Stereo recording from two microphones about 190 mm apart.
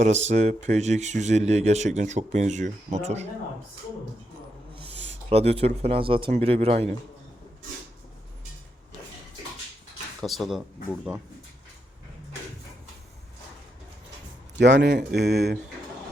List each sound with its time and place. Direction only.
0.0 s speech: 35° right (ahead or behind)
4.8 s speech: 30° right (ahead or behind)
10.2 s speech: centre (ahead or behind)
14.6 s speech: 70° right (ahead or behind)